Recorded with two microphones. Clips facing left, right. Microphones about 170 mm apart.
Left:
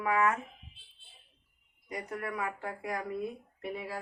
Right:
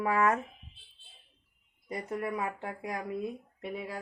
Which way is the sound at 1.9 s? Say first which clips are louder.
Right 3 dB; 25° right (ahead or behind).